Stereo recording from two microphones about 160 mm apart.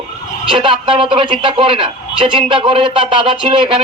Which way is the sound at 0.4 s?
30° right (ahead or behind).